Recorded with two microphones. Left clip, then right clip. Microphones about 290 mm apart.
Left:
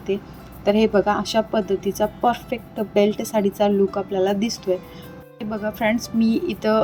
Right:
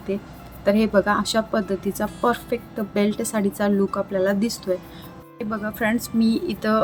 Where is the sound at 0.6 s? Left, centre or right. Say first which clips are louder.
Left 1 dB; centre.